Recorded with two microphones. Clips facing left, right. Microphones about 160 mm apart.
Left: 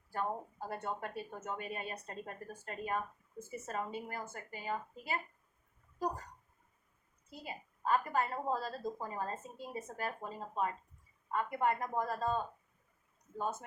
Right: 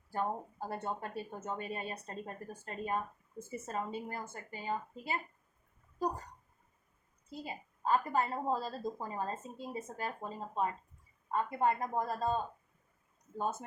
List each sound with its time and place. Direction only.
0.7 s a woman's voice: 30° right (ahead or behind)
7.4 s a woman's voice: 30° right (ahead or behind)